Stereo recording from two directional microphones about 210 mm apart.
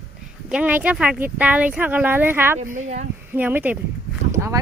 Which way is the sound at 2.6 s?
35° right (ahead or behind).